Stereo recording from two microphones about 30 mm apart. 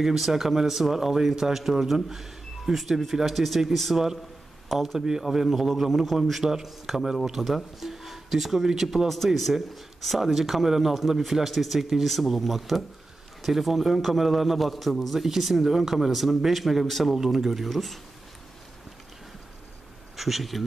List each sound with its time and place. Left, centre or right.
0.0 s a man's voice: centre
4.6 s speech: centre
4.9 s a man's voice: centre
9.1 s a man's voice: centre
15.1 s a man's voice: centre
17.2 s speech: centre
17.6 s a man's voice: centre
20.2 s speech: centre